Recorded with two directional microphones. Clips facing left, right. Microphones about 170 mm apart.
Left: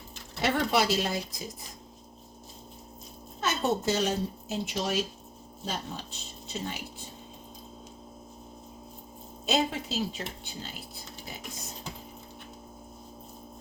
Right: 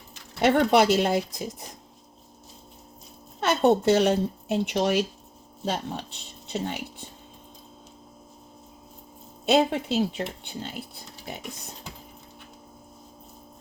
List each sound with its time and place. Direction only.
0.4 s speech: 60° right (ahead or behind)
3.4 s speech: 60° right (ahead or behind)
9.5 s speech: 60° right (ahead or behind)